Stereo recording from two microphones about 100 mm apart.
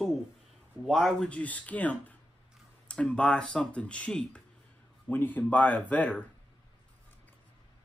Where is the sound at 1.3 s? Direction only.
15° left (ahead or behind).